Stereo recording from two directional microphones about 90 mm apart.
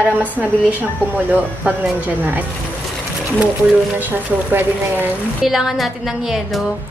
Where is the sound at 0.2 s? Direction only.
15° right (ahead or behind).